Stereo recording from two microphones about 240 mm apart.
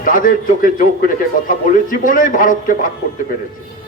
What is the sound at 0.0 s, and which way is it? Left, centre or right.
A man's voice, left.